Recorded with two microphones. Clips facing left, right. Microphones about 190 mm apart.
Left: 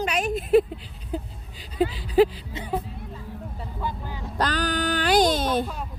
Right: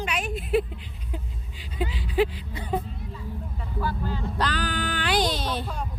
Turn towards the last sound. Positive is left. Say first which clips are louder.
# left 5 dB
turn(degrees=50)  # may be behind; listen again after turning